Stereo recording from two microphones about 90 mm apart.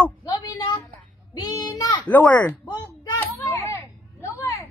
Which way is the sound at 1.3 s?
45° left (ahead or behind).